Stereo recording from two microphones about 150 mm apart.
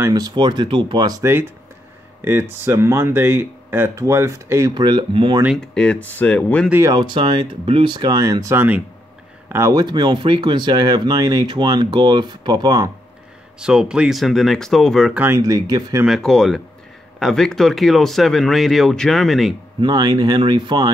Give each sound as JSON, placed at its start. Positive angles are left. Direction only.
{"t": 0.0, "sound": "speech", "side_deg": -25}
{"t": 5.6, "sound": "speech", "side_deg": 5}
{"t": 6.7, "sound": "speech", "side_deg": -20}
{"t": 7.0, "sound": "speech", "side_deg": -30}
{"t": 13.6, "sound": "speech", "side_deg": -5}
{"t": 15.1, "sound": "speech", "side_deg": -15}
{"t": 16.1, "sound": "speech", "side_deg": 5}
{"t": 19.8, "sound": "speech", "side_deg": -30}